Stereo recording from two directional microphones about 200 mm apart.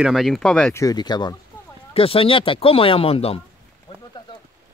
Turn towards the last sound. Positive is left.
turn(degrees=25)  # may be behind; listen again after turning